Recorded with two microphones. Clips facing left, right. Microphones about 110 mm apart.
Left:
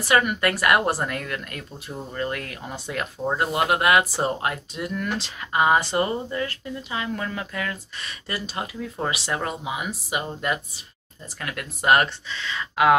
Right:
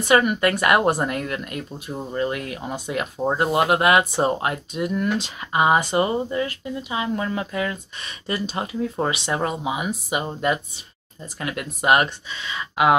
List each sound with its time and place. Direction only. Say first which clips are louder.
0.0 s speech: right 3 dB; 20° right (ahead or behind)